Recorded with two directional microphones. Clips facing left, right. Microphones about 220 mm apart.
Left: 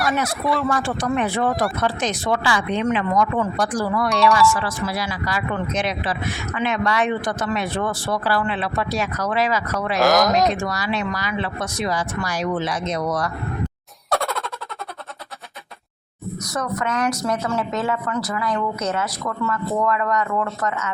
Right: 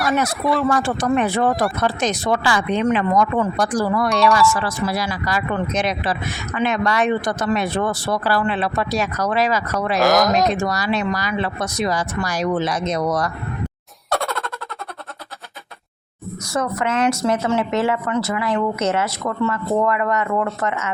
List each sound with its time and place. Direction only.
0.0 s speech: centre (ahead or behind)
0.7 s speech: 45° right (ahead or behind)
4.1 s speech: centre (ahead or behind)
4.6 s speech: 40° right (ahead or behind)
10.0 s speech: centre (ahead or behind)
10.6 s speech: 40° right (ahead or behind)
14.1 s a sound: centre (ahead or behind)
16.5 s speech: 25° right (ahead or behind)